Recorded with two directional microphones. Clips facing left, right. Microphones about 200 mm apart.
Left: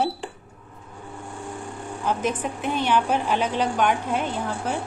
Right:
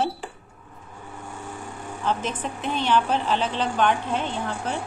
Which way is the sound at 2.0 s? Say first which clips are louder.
Left 2 dB; 10° left (ahead or behind).